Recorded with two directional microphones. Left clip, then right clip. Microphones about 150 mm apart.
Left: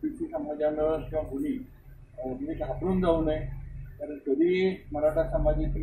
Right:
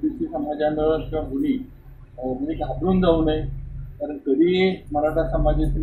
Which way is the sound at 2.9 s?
45° right (ahead or behind).